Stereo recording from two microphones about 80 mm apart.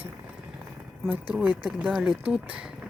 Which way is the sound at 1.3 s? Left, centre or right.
Right.